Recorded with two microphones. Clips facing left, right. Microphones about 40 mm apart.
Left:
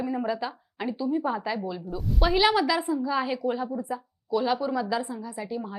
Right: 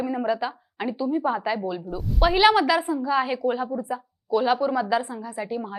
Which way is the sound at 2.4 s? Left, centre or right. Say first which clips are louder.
Right 5 dB; right.